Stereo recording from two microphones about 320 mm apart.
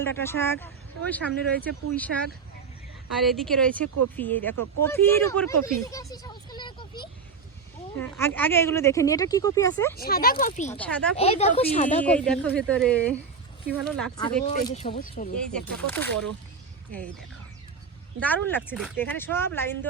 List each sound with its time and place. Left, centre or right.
0.0 s speech: centre
10.0 s speech: left
10.8 s speech: centre
11.2 s speech: centre
12.0 s speech: centre
14.4 s speech: left
15.4 s speech: centre
18.2 s speech: centre